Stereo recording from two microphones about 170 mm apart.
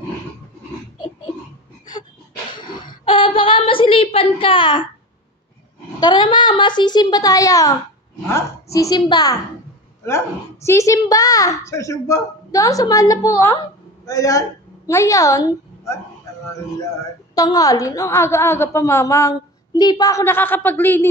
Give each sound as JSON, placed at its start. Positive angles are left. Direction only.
{"t": 2.5, "sound": "a sound", "side_deg": 30}
{"t": 5.9, "sound": "a woman's voice", "side_deg": 25}
{"t": 8.7, "sound": "a woman's voice", "side_deg": 25}
{"t": 17.4, "sound": "a woman's voice", "side_deg": 20}